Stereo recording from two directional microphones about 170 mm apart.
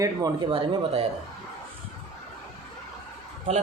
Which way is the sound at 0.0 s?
25° right (ahead or behind).